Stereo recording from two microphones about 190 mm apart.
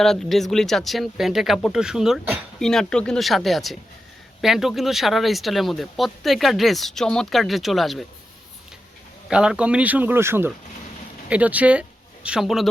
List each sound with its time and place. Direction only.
0.0 s speech: centre (ahead or behind)
9.3 s speech: 5° right (ahead or behind)